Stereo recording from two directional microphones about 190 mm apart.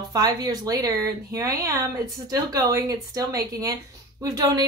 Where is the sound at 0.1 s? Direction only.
20° right (ahead or behind).